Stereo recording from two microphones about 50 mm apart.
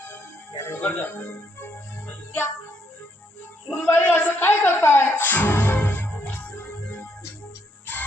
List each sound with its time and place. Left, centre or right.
0.8 s speech: left
3.7 s music: left